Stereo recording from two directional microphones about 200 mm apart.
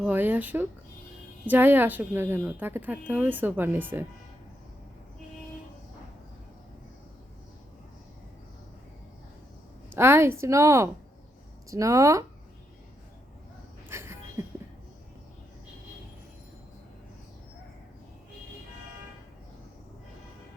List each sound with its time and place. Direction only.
0.0 s speech: 10° right (ahead or behind)
9.9 s speech: 10° right (ahead or behind)
13.9 s a sound: 15° right (ahead or behind)